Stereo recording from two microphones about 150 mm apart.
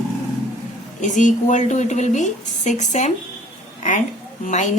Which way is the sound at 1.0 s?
55° left (ahead or behind).